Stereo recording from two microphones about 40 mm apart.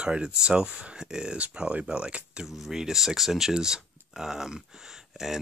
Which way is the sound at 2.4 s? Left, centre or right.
Centre.